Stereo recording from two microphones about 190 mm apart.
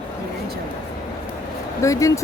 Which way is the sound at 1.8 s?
15° left (ahead or behind).